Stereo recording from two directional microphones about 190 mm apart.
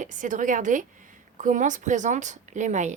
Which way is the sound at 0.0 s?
40° right (ahead or behind).